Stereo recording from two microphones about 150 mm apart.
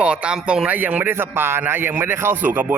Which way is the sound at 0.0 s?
5° right (ahead or behind).